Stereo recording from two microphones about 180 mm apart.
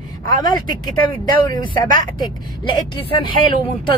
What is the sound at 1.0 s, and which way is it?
Speech, 25° left (ahead or behind).